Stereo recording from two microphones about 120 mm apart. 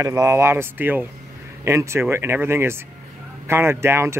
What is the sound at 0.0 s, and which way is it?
Speech, 25° right (ahead or behind).